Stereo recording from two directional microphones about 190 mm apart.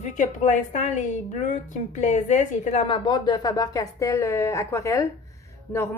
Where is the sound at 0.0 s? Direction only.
40° left (ahead or behind).